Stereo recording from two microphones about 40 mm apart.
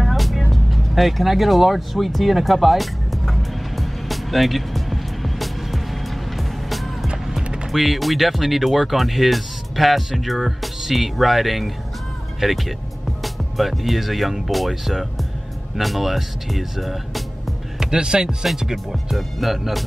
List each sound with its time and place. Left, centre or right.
0.0 s music: centre
7.1 s music: centre
7.6 s speech: centre
17.7 s speech: centre
18.9 s speech: centre